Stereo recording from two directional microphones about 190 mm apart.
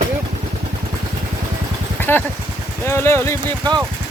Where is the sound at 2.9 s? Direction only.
15° left (ahead or behind).